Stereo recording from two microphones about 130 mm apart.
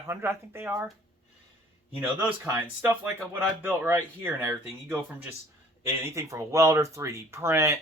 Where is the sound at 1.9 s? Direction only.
10° right (ahead or behind).